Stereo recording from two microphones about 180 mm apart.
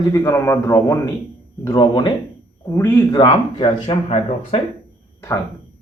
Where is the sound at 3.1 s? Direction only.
25° left (ahead or behind).